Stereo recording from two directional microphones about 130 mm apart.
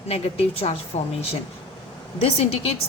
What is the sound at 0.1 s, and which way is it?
Speech, 50° left (ahead or behind).